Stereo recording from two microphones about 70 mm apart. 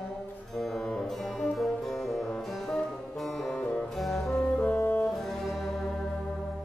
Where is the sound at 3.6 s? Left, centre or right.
Centre.